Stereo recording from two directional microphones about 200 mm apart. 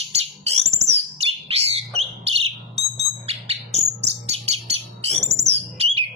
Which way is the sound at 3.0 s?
30° right (ahead or behind).